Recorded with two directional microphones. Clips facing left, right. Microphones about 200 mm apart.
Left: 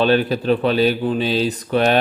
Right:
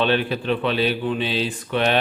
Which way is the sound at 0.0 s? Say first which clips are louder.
Left 4 dB; 40° left (ahead or behind).